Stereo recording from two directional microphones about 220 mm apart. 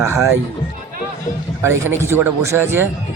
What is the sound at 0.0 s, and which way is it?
Speech, 10° right (ahead or behind).